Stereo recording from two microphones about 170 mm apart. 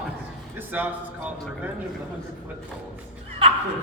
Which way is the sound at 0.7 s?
10° right (ahead or behind).